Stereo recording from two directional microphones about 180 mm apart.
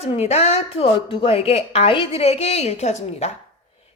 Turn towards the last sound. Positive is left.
turn(degrees=40)  # may be behind; listen again after turning